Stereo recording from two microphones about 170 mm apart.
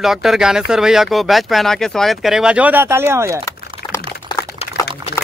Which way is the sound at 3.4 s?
15° left (ahead or behind).